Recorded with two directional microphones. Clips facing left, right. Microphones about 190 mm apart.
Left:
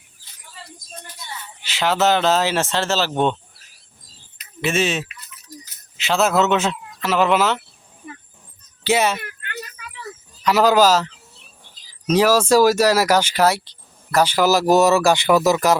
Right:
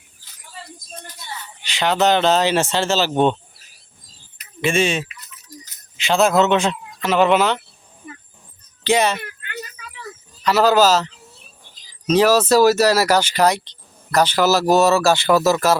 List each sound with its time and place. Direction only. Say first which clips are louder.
1.6 s speech: right 1 dB; 5° left (ahead or behind)
4.6 s speech: right 2 dB; 5° left (ahead or behind)
8.8 s speech: right 1 dB; 5° left (ahead or behind)
10.4 s speech: even; 15° left (ahead or behind)
12.0 s speech: right 1 dB; 10° left (ahead or behind)